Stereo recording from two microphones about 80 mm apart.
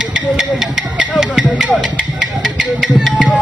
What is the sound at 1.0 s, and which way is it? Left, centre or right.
Music, centre.